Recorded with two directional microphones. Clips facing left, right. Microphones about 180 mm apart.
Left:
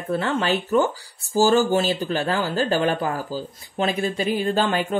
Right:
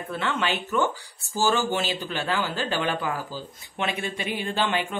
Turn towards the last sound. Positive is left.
turn(degrees=40)  # may be behind; listen again after turning